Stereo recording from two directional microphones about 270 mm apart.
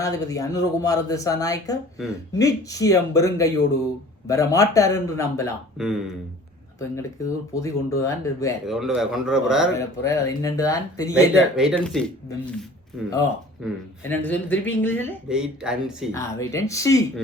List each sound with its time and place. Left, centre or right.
0.0 s speech: centre
5.7 s speech: centre
6.7 s speech: centre
8.6 s a man's voice: centre
9.7 s speech: centre
11.1 s a man's voice: centre
14.0 s a man's voice: centre
16.1 s speech: centre